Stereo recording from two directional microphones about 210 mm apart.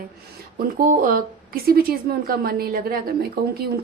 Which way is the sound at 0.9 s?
40° right (ahead or behind).